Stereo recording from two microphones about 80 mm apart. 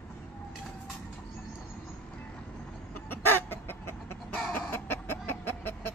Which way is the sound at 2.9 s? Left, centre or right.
Left.